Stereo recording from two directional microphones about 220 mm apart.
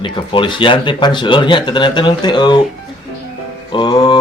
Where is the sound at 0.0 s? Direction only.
20° left (ahead or behind).